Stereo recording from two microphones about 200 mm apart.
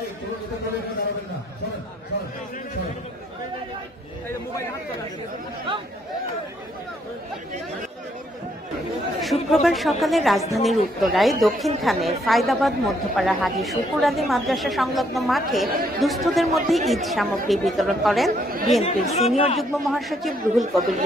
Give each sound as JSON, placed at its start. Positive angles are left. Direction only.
{"t": 9.2, "sound": "speech", "side_deg": 0}
{"t": 18.3, "sound": "speech", "side_deg": -45}
{"t": 18.7, "sound": "speech", "side_deg": 0}
{"t": 19.3, "sound": "speech", "side_deg": 30}
{"t": 19.6, "sound": "speech", "side_deg": 0}